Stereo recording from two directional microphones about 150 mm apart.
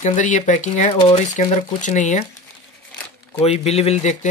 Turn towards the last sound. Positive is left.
turn(degrees=45)  # may be behind; listen again after turning